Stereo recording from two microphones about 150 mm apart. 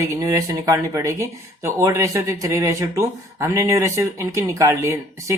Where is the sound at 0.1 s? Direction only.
25° right (ahead or behind).